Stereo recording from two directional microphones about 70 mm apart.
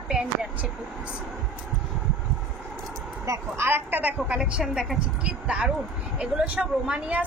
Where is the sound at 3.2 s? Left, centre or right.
Right.